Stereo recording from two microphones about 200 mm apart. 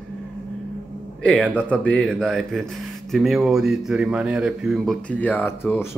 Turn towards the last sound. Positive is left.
turn(degrees=10)  # may be behind; listen again after turning